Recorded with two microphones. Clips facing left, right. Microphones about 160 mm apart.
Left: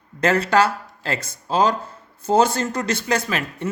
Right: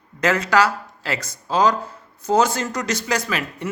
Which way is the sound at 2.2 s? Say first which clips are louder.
Left 1 dB; 30° left (ahead or behind).